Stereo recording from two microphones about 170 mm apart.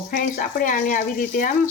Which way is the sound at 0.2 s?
50° left (ahead or behind).